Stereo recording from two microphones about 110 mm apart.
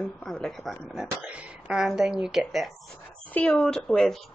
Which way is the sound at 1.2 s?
10° right (ahead or behind).